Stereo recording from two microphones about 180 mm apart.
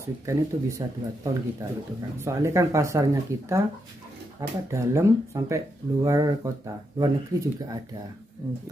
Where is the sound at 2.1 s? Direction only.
15° right (ahead or behind).